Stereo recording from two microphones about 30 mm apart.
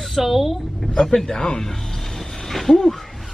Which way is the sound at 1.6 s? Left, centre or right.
Centre.